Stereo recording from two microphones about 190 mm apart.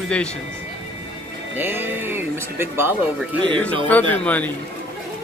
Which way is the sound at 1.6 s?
10° right (ahead or behind).